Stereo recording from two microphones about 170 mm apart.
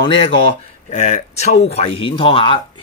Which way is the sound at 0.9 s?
45° left (ahead or behind).